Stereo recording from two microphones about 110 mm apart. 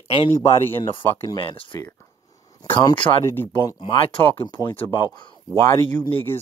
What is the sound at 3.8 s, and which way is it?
Speech, 55° left (ahead or behind).